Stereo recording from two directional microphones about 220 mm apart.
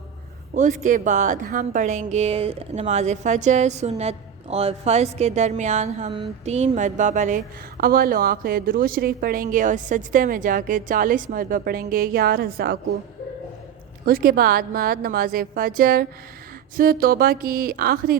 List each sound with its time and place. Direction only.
0.5 s a woman's voice: 35° right (ahead or behind)
14.0 s a woman's voice: 45° right (ahead or behind)